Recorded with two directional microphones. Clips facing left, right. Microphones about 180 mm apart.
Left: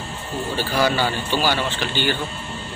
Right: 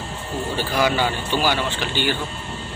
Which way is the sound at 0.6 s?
15° right (ahead or behind).